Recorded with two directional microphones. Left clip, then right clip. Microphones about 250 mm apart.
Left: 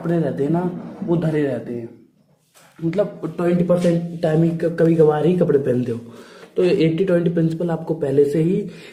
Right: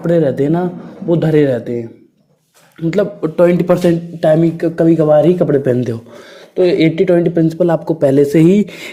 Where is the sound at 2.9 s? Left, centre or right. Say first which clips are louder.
Right 6 dB; right.